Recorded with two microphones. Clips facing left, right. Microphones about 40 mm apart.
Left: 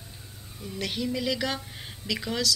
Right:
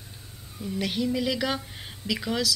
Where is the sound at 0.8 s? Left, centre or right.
Centre.